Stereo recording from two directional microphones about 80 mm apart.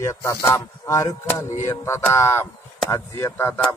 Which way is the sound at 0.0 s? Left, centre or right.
Left.